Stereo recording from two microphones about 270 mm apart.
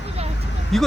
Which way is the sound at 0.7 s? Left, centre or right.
Centre.